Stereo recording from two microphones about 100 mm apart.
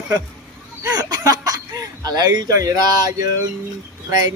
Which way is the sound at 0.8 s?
40° right (ahead or behind).